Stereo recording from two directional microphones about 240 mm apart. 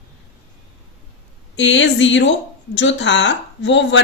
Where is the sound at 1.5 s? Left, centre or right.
Left.